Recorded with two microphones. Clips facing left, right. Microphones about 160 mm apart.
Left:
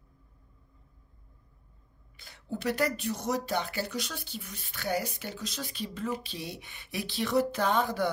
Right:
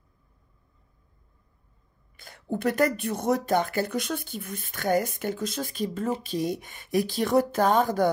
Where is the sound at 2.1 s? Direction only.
50° right (ahead or behind).